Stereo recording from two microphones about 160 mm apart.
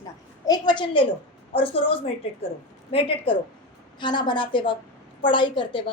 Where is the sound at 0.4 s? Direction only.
25° left (ahead or behind).